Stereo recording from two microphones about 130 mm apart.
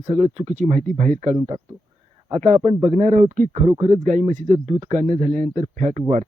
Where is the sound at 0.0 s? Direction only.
55° right (ahead or behind); by 1.4 s 70° right (ahead or behind).